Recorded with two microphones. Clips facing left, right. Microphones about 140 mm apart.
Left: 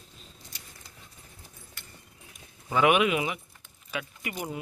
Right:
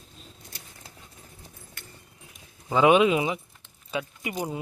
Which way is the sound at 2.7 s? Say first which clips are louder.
Right 4 dB; 20° right (ahead or behind).